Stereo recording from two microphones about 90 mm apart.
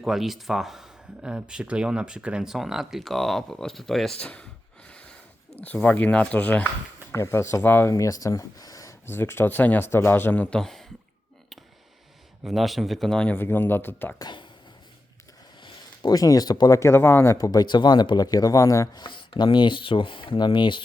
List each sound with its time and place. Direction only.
0.0 s speech: 5° right (ahead or behind)
4.2 s speech: 15° left (ahead or behind)
4.9 s a sound: 10° left (ahead or behind)
5.5 s speech: 20° left (ahead or behind)
7.1 s speech: 30° left (ahead or behind)
9.0 s speech: 25° left (ahead or behind)
10.6 s speech: 5° left (ahead or behind)
12.5 s speech: centre (ahead or behind)
13.3 s speech: 25° left (ahead or behind)
14.2 s speech: 55° left (ahead or behind)
16.0 s speech: 40° left (ahead or behind)
17.3 s speech: 45° left (ahead or behind)
19.0 s speech: 60° left (ahead or behind)